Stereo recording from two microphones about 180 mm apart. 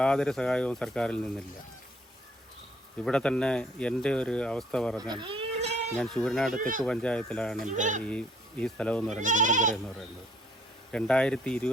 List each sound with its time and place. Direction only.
0.0 s speech: 5° left (ahead or behind)
3.0 s speech: 5° left (ahead or behind)
4.9 s goat: 25° right (ahead or behind)
6.1 s speech: centre (ahead or behind)
6.6 s speech: 50° right (ahead or behind)
6.8 s speech: 5° left (ahead or behind)
7.7 s speech: 45° right (ahead or behind)
8.0 s speech: 5° left (ahead or behind)
9.2 s speech: 45° right (ahead or behind)
10.9 s speech: 5° left (ahead or behind)